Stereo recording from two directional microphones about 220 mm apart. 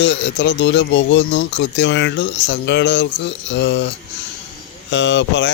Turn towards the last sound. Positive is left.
turn(degrees=55)  # may be behind; listen again after turning